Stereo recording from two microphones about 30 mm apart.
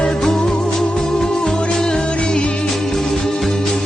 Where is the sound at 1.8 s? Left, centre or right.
Left.